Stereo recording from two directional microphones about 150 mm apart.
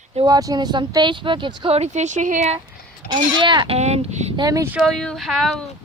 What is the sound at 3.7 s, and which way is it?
Speech, 45° right (ahead or behind).